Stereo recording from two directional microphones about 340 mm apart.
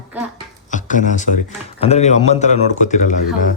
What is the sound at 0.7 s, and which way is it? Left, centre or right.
Speech, left.